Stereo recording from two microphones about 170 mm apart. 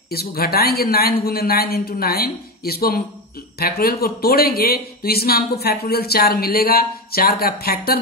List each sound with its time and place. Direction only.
0.1 s speech: 65° left (ahead or behind)